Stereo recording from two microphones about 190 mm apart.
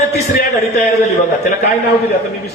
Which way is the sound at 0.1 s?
55° left (ahead or behind).